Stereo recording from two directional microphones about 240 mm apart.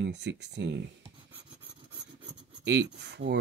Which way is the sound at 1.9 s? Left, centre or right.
Centre.